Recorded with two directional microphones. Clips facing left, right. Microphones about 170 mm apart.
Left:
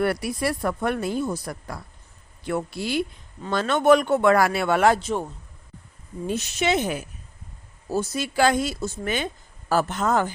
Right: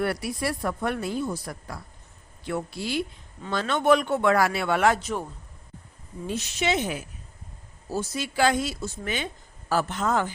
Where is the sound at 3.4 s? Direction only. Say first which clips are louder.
Left 4 dB; 45° left (ahead or behind).